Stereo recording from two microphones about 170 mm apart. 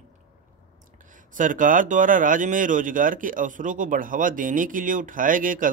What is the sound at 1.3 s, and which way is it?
Speech, 50° right (ahead or behind).